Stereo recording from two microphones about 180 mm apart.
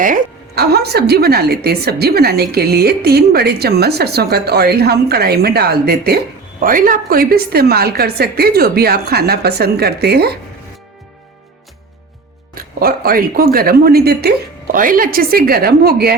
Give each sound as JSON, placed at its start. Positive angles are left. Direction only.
{"t": 0.0, "sound": "a woman's voice", "side_deg": -55}
{"t": 6.6, "sound": "a woman's voice", "side_deg": -50}
{"t": 12.5, "sound": "a woman's voice", "side_deg": -55}